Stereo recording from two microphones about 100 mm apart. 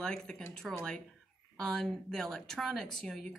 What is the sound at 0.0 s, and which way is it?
Speech, 5° left (ahead or behind).